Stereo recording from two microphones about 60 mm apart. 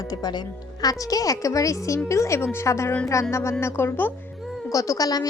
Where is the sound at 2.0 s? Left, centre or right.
Left.